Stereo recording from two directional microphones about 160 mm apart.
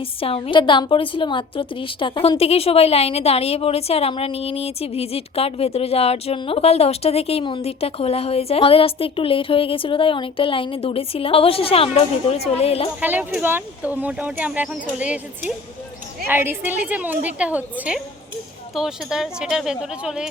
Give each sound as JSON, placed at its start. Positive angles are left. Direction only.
{"t": 0.2, "sound": "a woman's voice", "side_deg": 35}
{"t": 13.0, "sound": "speech", "side_deg": -10}